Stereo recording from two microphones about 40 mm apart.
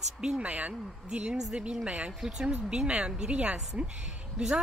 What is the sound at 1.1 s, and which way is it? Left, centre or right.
Speech, centre.